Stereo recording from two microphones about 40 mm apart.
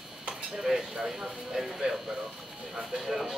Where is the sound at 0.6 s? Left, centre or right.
Centre.